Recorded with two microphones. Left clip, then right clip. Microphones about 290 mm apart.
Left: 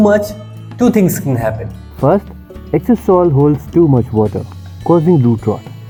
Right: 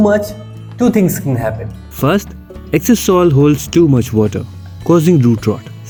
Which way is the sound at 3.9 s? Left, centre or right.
Right.